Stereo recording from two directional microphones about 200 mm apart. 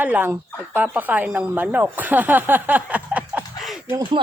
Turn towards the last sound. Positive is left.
turn(degrees=-20)  # may be behind; listen again after turning